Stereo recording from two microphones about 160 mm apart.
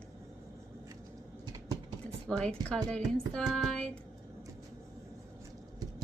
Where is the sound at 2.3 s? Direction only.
5° left (ahead or behind).